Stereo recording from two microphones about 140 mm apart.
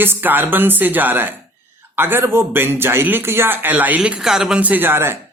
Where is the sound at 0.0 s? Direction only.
15° right (ahead or behind).